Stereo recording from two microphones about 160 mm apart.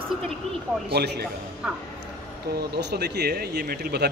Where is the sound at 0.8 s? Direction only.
90° right.